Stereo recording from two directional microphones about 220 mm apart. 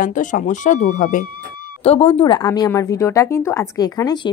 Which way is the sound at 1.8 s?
25° left (ahead or behind).